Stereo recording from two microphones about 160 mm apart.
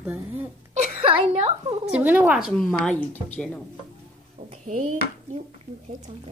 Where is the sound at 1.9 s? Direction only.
10° right (ahead or behind).